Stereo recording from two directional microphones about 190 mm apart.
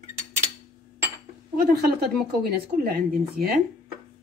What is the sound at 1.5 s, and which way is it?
A woman's voice, 55° right (ahead or behind).